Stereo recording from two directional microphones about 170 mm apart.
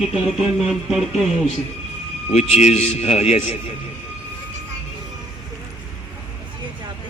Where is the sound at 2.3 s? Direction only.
40° left (ahead or behind).